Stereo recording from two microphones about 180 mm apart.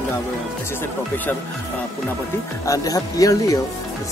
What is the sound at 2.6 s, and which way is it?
Speech, 20° left (ahead or behind).